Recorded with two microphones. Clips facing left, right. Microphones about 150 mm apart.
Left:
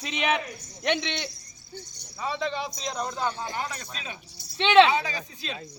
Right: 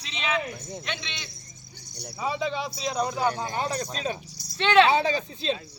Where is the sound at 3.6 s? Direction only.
35° right (ahead or behind).